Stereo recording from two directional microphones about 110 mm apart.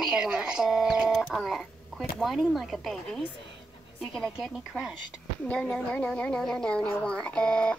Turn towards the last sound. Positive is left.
turn(degrees=10)  # may be behind; listen again after turning